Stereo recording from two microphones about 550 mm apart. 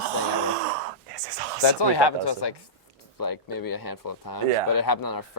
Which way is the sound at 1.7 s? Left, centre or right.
Left.